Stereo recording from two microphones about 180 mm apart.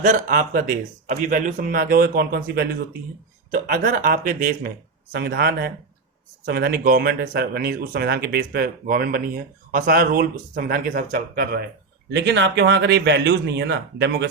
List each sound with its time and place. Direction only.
0.0 s a man's voice: 50° right (ahead or behind)
12.1 s speech: 75° right (ahead or behind)